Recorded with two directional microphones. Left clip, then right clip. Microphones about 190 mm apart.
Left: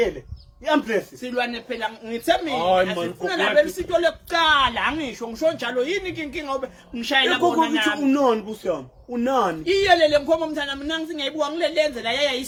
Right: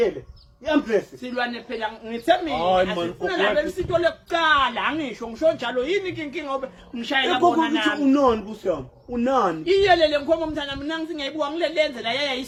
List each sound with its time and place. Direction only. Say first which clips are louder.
0.6 s a woman's voice: even; 30° left (ahead or behind)
1.3 s a woman's voice: left 2 dB; 45° left (ahead or behind)
9.6 s speech: left 1 dB; 45° left (ahead or behind)